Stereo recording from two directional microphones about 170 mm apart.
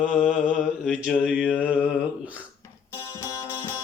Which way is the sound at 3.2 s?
15° left (ahead or behind).